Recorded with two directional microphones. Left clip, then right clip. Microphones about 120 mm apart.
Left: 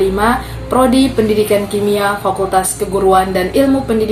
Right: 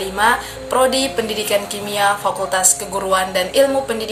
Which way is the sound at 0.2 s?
20° right (ahead or behind).